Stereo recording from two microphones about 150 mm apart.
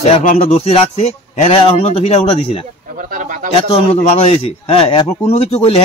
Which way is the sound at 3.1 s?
65° right (ahead or behind).